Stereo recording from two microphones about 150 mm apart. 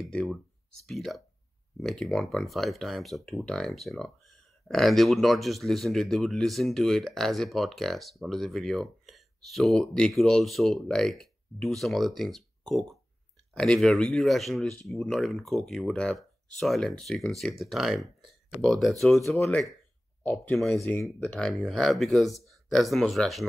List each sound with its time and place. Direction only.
0.0 s speech: centre (ahead or behind)
20.7 s speech: 15° left (ahead or behind)
21.0 s speech: 5° left (ahead or behind)